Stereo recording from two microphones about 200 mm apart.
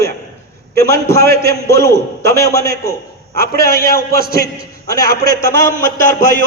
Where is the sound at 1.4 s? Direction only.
15° left (ahead or behind).